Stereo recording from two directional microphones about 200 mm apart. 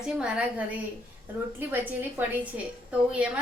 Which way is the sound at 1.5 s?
10° right (ahead or behind).